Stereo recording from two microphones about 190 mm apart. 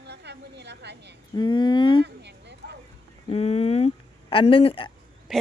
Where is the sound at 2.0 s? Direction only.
60° right (ahead or behind).